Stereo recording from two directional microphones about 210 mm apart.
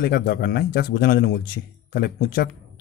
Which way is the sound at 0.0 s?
45° left (ahead or behind).